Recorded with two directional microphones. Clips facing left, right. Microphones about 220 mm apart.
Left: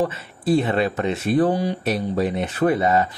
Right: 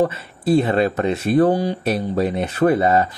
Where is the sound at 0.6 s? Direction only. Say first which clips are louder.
Right 5 dB; 40° right (ahead or behind).